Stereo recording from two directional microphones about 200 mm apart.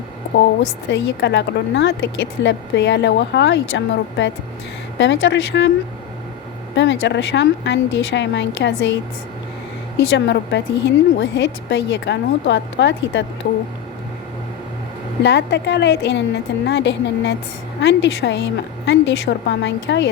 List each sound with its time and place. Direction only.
0.9 s a woman's voice: 60° left (ahead or behind)
6.7 s a woman's voice: 65° left (ahead or behind)
10.1 s a woman's voice: 60° left (ahead or behind)
15.2 s a woman's voice: 60° left (ahead or behind)